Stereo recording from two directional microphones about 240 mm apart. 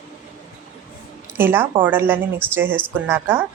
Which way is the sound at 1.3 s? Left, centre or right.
Centre.